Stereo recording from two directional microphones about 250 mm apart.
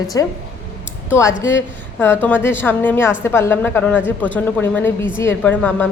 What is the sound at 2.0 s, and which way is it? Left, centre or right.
Speech, centre.